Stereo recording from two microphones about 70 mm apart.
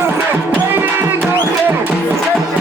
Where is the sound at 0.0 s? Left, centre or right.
Right.